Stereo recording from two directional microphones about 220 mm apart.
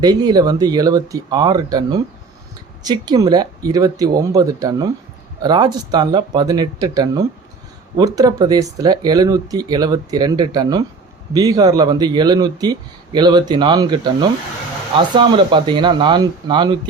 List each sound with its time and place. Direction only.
0.0 s speech: 20° right (ahead or behind)